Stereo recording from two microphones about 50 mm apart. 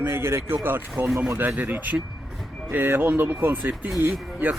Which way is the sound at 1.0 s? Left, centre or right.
Right.